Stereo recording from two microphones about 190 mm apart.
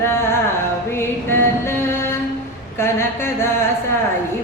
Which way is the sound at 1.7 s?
10° left (ahead or behind).